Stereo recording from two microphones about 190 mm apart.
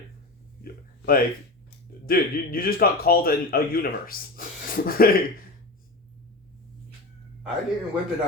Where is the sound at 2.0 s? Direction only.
50° left (ahead or behind).